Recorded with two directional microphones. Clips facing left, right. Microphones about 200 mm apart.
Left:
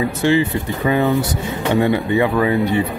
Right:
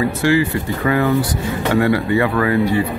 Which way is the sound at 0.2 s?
20° left (ahead or behind).